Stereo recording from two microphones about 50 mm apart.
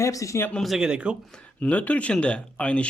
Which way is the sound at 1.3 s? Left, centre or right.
Left.